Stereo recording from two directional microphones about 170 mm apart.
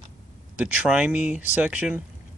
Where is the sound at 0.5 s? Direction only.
5° right (ahead or behind).